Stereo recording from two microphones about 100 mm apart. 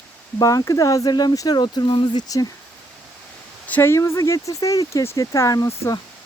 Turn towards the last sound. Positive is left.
turn(degrees=35)  # may be behind; listen again after turning